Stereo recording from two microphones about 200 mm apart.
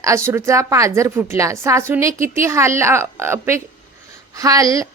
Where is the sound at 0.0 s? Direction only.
15° right (ahead or behind).